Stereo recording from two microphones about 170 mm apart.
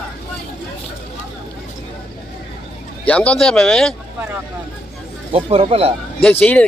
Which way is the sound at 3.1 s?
5° left (ahead or behind).